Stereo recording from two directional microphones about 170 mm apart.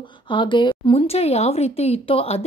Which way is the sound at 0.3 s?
30° left (ahead or behind).